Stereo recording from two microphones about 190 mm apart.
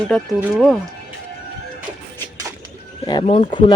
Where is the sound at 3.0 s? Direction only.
25° left (ahead or behind).